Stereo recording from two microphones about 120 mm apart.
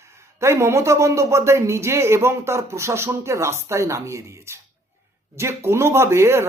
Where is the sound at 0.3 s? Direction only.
20° right (ahead or behind).